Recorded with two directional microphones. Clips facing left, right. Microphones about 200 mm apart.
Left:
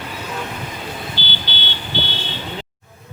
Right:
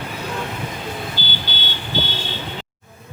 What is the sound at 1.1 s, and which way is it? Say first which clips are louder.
Vehicle: even; 45° right (ahead or behind).